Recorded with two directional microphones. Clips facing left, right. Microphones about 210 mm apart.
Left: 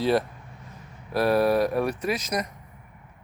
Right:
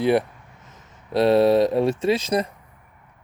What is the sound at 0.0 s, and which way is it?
Speech, 15° right (ahead or behind).